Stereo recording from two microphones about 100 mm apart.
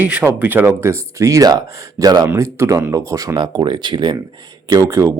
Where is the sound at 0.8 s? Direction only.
30° right (ahead or behind).